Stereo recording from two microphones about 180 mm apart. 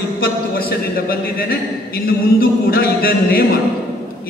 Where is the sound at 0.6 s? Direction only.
60° left (ahead or behind).